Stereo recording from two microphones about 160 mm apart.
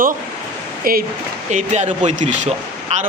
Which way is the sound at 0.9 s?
65° right (ahead or behind).